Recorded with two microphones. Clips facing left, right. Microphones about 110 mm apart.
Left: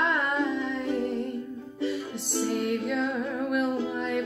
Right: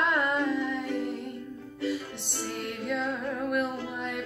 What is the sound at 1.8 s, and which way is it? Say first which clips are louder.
Music: left 2 dB; centre (ahead or behind).